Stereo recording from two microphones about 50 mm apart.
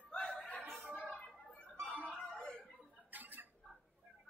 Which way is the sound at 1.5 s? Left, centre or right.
Left.